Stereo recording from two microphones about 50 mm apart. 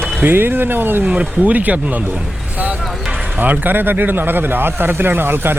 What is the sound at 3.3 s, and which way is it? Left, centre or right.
A man's voice, right.